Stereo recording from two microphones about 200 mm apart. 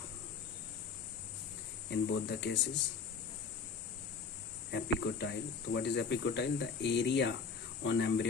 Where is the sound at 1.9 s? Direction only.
60° left (ahead or behind).